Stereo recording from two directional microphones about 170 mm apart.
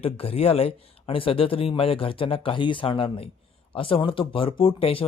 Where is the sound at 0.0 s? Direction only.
35° left (ahead or behind).